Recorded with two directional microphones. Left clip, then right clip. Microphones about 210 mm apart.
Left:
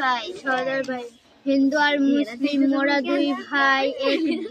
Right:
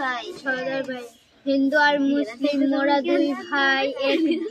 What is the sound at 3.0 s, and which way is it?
Speech, 30° left (ahead or behind).